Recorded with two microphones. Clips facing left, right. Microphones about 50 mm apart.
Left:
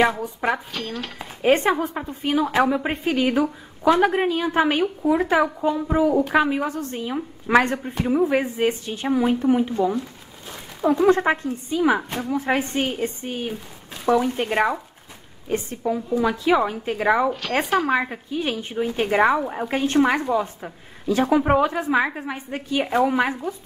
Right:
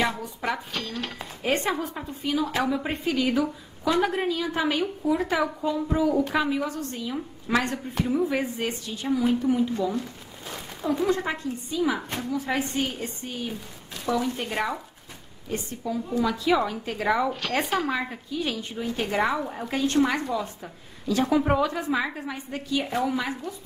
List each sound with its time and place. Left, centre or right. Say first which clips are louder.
0.1 s a woman's voice: left 5 dB; left
0.7 s speech: left 2 dB; centre
1.4 s a woman's voice: left 7 dB; left
11.0 s a woman's voice: left 9 dB; left
17.3 s speech: left 4 dB; centre
17.9 s a woman's voice: left 6 dB; left